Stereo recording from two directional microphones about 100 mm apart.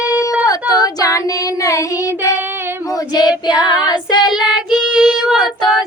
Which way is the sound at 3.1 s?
45° left (ahead or behind).